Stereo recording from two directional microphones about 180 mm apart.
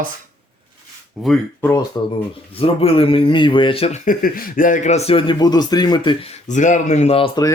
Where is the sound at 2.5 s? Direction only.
30° left (ahead or behind).